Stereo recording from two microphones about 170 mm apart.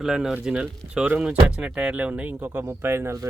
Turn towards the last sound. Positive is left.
turn(degrees=-15)  # may be behind; listen again after turning